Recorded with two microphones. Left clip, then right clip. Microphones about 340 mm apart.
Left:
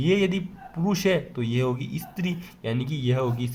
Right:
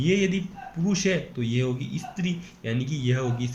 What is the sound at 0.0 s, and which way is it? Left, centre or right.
Speech, centre.